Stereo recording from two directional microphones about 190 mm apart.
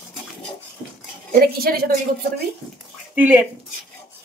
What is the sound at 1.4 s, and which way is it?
Speech, 55° right (ahead or behind).